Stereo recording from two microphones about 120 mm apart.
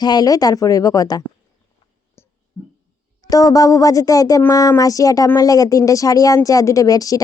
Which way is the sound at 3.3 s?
30° left (ahead or behind).